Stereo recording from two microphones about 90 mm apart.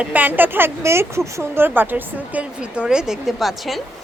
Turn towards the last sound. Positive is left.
turn(degrees=0)  # may be behind; listen again after turning